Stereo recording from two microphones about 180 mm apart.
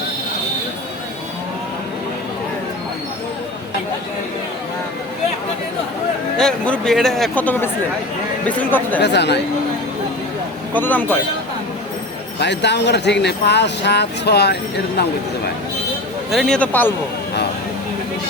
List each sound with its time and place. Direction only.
6.3 s a man's voice: 5° left (ahead or behind)
9.0 s speech: 70° left (ahead or behind)
10.8 s speech: 10° left (ahead or behind)
12.4 s speech: 70° left (ahead or behind)
16.3 s a man's voice: centre (ahead or behind)